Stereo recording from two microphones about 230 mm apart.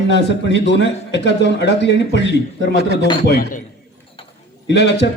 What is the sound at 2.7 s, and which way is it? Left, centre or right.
Speech, right.